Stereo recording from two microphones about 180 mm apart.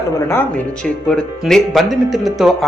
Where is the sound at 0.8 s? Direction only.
5° left (ahead or behind).